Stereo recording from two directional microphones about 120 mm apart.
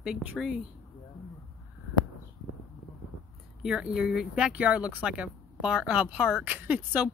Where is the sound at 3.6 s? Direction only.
5° right (ahead or behind).